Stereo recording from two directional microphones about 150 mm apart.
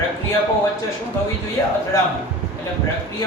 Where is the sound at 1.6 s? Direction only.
20° left (ahead or behind).